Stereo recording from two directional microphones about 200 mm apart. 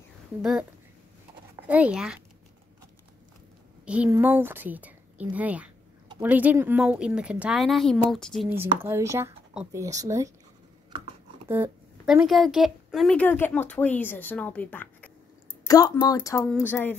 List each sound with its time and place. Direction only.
0.4 s a woman's voice: 5° right (ahead or behind)
1.7 s a woman's voice: 5° right (ahead or behind)
3.8 s a woman's voice: 5° right (ahead or behind)
8.5 s a woman's voice: 10° right (ahead or behind)
11.4 s a woman's voice: 10° right (ahead or behind); by 16.9 s 10° left (ahead or behind)